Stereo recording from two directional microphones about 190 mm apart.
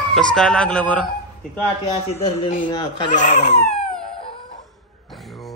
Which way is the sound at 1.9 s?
30° left (ahead or behind).